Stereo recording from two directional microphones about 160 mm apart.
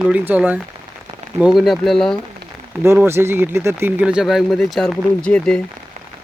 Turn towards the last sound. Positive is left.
turn(degrees=5)  # may be behind; listen again after turning